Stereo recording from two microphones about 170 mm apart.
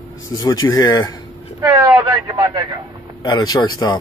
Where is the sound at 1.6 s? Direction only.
20° right (ahead or behind).